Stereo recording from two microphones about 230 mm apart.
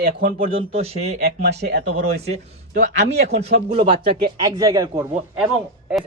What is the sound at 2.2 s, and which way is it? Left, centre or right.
Speech, right.